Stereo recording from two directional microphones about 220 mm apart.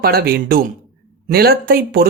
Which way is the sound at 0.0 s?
45° right (ahead or behind).